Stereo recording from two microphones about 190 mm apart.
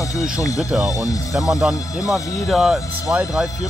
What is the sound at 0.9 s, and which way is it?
Speech, 20° left (ahead or behind).